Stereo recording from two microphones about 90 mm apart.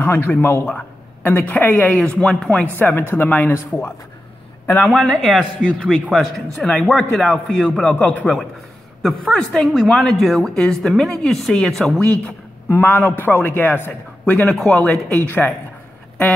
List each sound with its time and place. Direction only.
0.0 s a woman's voice: 20° left (ahead or behind)
4.8 s a woman's voice: centre (ahead or behind)
5.6 s a man's voice: 10° left (ahead or behind)
12.6 s a woman's voice: 25° left (ahead or behind)